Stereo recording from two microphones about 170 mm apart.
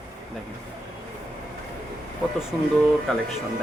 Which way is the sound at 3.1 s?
5° left (ahead or behind).